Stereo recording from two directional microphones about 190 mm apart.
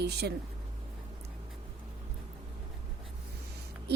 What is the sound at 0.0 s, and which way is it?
Speech, 60° right (ahead or behind).